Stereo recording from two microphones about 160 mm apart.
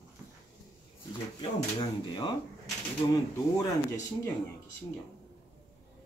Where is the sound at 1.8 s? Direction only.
25° left (ahead or behind).